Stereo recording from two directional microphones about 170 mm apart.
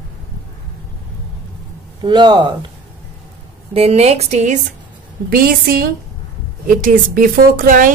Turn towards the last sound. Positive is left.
turn(degrees=-50)  # may be behind; listen again after turning